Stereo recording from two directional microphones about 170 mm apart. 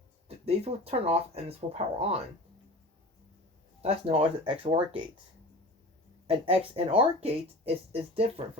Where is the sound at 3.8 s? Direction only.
35° right (ahead or behind).